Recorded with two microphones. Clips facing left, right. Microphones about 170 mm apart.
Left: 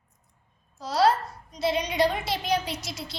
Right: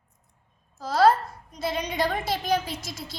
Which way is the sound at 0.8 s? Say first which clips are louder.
Right 3 dB; 50° right (ahead or behind).